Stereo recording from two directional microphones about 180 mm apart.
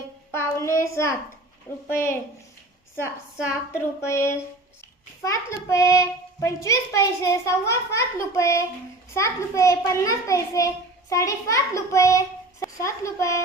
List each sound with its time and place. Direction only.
0.3 s child singing: 15° left (ahead or behind)
1.9 s a child's voice: 15° left (ahead or behind)
3.3 s a woman's voice: 5° right (ahead or behind)
3.7 s a child's voice: 15° left (ahead or behind)